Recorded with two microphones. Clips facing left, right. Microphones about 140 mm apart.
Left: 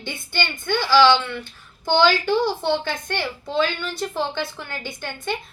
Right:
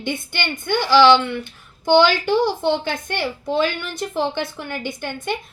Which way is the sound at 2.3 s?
20° right (ahead or behind).